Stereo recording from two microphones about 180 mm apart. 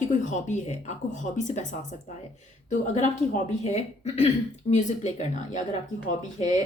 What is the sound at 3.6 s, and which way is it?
Speech, 35° left (ahead or behind).